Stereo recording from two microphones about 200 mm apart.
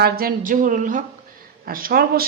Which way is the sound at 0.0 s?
50° right (ahead or behind).